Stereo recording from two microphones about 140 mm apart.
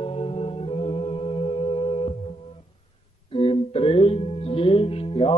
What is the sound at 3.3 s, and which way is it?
Music, 40° left (ahead or behind).